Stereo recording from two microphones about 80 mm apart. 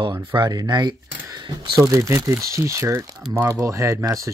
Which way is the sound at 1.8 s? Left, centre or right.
Right.